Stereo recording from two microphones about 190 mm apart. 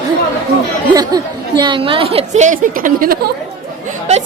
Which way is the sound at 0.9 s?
20° right (ahead or behind).